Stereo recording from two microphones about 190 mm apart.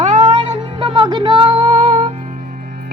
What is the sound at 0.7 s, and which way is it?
Music, 25° right (ahead or behind).